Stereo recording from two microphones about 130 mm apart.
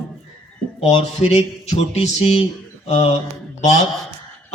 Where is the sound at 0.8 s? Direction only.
50° left (ahead or behind).